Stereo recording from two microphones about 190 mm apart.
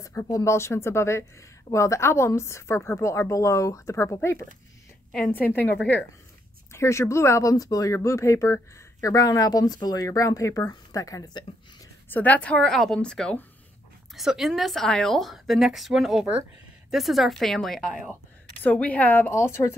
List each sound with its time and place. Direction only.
0.0 s speech: 15° left (ahead or behind)
5.5 s speech: 10° left (ahead or behind)
12.1 s a woman's voice: 10° left (ahead or behind)